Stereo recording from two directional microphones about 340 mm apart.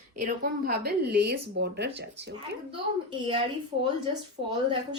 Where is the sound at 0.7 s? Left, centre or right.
Right.